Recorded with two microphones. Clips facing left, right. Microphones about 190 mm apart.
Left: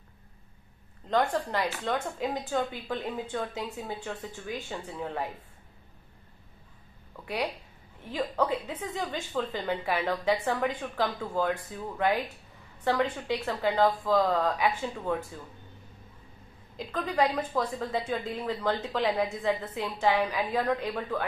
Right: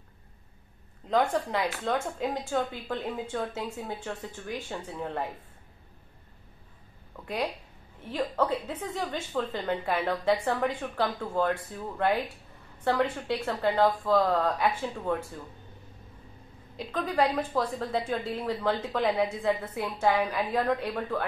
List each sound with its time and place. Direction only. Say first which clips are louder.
1.0 s speech: right 1 dB; 5° right (ahead or behind)
8.1 s a woman's voice: right 1 dB; centre (ahead or behind)
13.3 s speech: right 1 dB; 5° left (ahead or behind)
17.0 s a woman's voice: right 1 dB; 5° right (ahead or behind)
17.6 s speech: right 1 dB; 5° left (ahead or behind)
18.0 s a woman's voice: right 1 dB; 10° right (ahead or behind)